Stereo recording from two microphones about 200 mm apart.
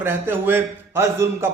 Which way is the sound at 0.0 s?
10° right (ahead or behind).